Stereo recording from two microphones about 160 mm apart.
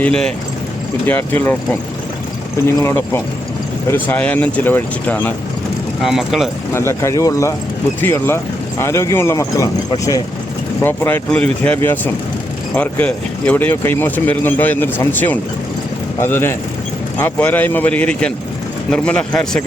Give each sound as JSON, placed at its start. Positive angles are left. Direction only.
{"t": 0.0, "sound": "speech", "side_deg": 5}
{"t": 6.0, "sound": "speech", "side_deg": 0}
{"t": 6.7, "sound": "speech", "side_deg": 15}